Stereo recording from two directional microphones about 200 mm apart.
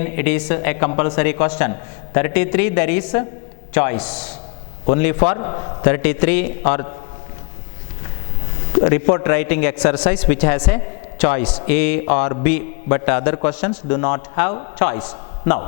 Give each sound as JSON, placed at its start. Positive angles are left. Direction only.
{"t": 0.0, "sound": "a man's voice", "side_deg": 15}
{"t": 5.9, "sound": "a man's voice", "side_deg": 10}
{"t": 8.8, "sound": "a man's voice", "side_deg": 15}